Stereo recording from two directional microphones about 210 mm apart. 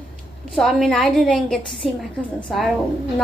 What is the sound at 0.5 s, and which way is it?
A woman's voice, centre (ahead or behind).